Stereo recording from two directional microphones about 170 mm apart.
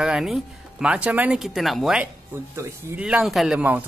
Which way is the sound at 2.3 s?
15° right (ahead or behind).